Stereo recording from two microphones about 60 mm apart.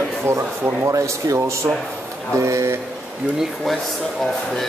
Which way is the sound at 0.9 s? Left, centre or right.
Right.